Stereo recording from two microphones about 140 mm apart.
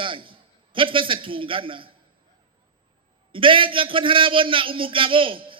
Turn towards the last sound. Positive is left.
turn(degrees=-40)  # may be behind; listen again after turning